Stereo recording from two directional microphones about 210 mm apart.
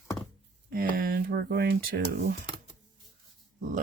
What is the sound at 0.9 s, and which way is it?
Speech, 45° right (ahead or behind).